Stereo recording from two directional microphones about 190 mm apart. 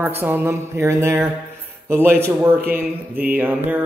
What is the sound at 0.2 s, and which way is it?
Mantra, 10° right (ahead or behind).